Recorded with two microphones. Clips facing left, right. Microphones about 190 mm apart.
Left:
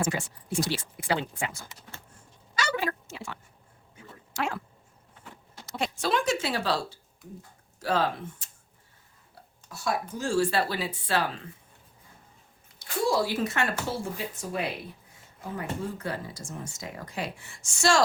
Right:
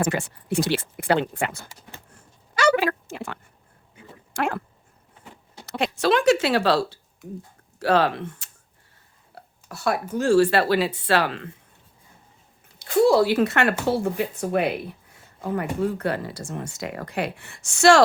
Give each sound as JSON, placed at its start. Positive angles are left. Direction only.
{"t": 0.0, "sound": "speech", "side_deg": -60}
{"t": 2.6, "sound": "a sound", "side_deg": -75}
{"t": 3.1, "sound": "speech", "side_deg": -55}
{"t": 4.4, "sound": "speech", "side_deg": -55}
{"t": 5.6, "sound": "speech", "side_deg": -70}
{"t": 12.8, "sound": "speech", "side_deg": -65}
{"t": 15.8, "sound": "speech", "side_deg": -70}